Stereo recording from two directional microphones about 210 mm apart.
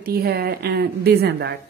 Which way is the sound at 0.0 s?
45° right (ahead or behind).